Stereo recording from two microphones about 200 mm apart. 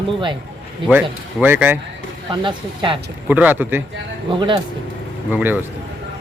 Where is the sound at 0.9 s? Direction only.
10° right (ahead or behind).